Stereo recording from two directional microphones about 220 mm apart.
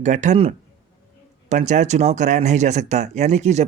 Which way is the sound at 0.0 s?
30° right (ahead or behind).